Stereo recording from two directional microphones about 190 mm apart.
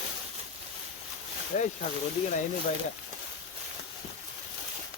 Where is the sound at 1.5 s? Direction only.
35° left (ahead or behind).